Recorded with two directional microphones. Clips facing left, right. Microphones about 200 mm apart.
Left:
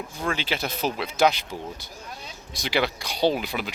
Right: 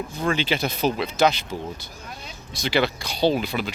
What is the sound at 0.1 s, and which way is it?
Speech, 10° left (ahead or behind).